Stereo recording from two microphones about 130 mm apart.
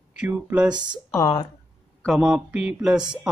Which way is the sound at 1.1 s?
30° left (ahead or behind).